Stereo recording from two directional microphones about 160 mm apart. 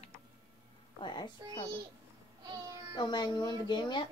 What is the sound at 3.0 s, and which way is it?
A woman's voice, 25° left (ahead or behind).